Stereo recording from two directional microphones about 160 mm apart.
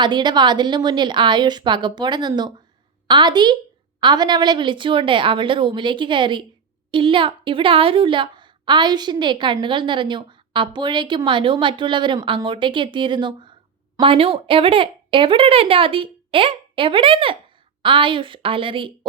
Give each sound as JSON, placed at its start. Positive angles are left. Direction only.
{"t": 0.0, "sound": "a woman's voice", "side_deg": -30}